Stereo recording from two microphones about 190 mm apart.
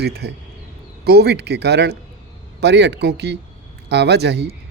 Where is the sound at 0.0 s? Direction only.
60° right (ahead or behind).